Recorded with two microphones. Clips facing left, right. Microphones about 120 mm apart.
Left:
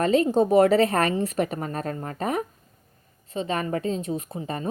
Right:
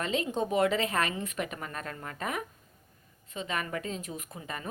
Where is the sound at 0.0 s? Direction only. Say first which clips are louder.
Left 11 dB; 40° left (ahead or behind).